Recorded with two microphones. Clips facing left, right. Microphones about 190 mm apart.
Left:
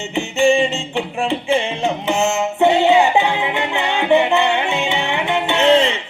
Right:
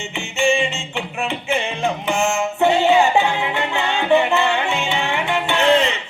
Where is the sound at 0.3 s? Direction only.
35° left (ahead or behind).